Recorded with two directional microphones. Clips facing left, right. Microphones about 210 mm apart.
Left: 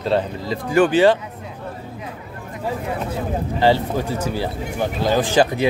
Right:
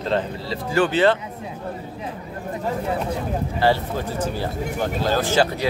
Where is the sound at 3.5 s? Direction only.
15° left (ahead or behind).